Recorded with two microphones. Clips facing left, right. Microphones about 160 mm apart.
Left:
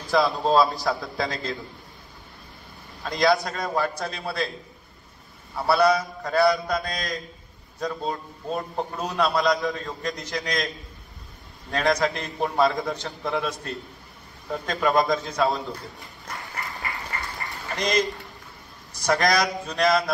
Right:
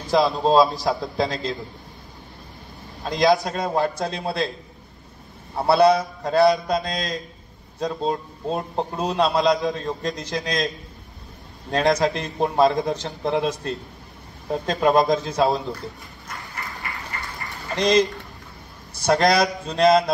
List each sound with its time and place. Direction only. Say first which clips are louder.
0.1 s a man's voice: right 3 dB; 20° right (ahead or behind)
3.0 s a man's voice: right 3 dB; 20° right (ahead or behind)
5.5 s a man's voice: right 4 dB; 25° right (ahead or behind)
11.7 s a man's voice: right 3 dB; 20° right (ahead or behind)
17.7 s a man's voice: right 6 dB; 20° right (ahead or behind)
19.0 s a man's voice: right 4 dB; 20° right (ahead or behind)